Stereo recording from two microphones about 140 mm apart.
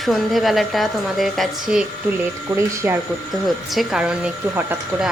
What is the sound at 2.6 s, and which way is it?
Speech, 20° right (ahead or behind).